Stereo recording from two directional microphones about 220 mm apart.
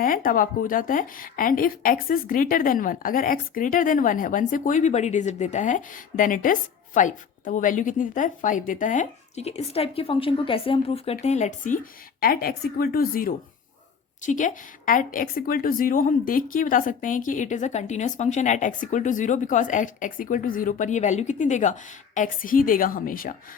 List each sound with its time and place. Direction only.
0.0 s a woman's voice: 40° left (ahead or behind)